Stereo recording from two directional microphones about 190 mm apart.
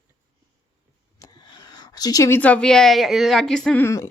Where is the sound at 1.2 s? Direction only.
20° left (ahead or behind).